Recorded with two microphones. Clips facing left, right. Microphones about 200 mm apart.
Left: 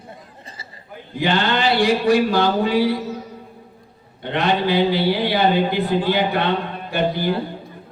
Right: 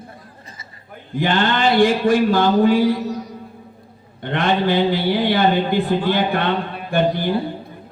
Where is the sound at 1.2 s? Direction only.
50° right (ahead or behind).